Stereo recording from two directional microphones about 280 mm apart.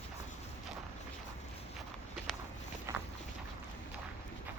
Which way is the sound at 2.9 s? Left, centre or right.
Centre.